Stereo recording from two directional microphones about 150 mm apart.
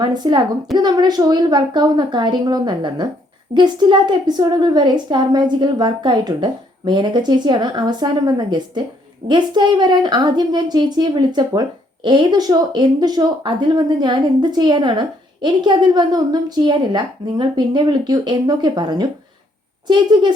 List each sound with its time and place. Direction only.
0.0 s speech: 30° right (ahead or behind)